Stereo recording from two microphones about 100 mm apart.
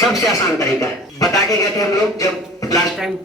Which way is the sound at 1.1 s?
35° left (ahead or behind).